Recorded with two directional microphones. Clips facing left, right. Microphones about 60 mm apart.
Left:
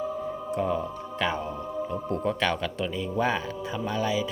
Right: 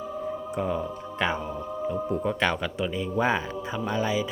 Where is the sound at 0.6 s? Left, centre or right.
Centre.